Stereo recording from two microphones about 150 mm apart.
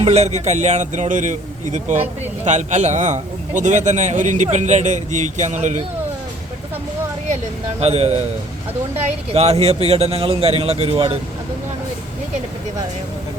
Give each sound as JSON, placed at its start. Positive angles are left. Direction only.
{"t": 0.0, "sound": "a man's voice", "side_deg": -45}
{"t": 7.8, "sound": "a man's voice", "side_deg": -45}
{"t": 9.3, "sound": "a man's voice", "side_deg": -45}